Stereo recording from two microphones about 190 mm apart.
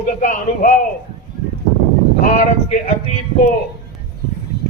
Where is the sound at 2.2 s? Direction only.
40° left (ahead or behind).